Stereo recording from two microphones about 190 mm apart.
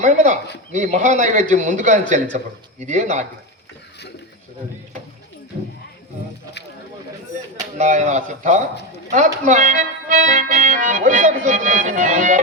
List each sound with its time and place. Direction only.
0.0 s speech: 40° right (ahead or behind)
7.6 s speech: 40° right (ahead or behind)